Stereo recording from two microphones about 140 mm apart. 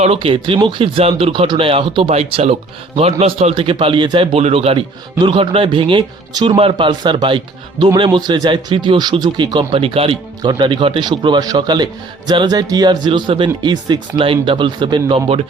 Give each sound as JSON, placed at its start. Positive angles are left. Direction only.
{"t": 0.0, "sound": "speech", "side_deg": -40}